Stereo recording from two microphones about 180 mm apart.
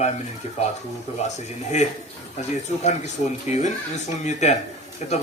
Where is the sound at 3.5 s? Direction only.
40° left (ahead or behind).